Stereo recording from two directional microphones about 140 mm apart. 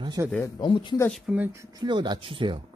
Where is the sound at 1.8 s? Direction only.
30° right (ahead or behind).